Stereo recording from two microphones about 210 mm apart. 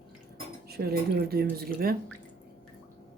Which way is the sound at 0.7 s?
50° right (ahead or behind).